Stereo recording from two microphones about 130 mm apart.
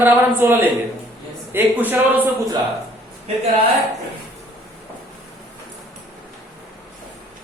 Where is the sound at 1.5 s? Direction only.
15° right (ahead or behind).